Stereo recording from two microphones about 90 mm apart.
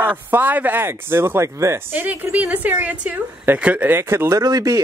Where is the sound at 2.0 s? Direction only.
20° right (ahead or behind).